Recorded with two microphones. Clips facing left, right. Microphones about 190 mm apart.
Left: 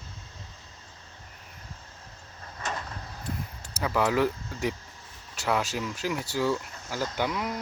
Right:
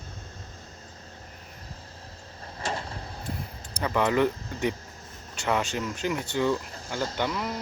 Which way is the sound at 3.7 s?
5° left (ahead or behind).